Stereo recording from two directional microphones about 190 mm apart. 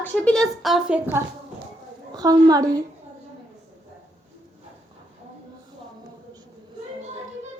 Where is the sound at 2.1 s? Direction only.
20° right (ahead or behind).